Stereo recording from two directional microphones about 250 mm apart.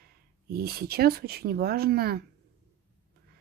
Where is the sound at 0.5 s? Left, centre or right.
Right.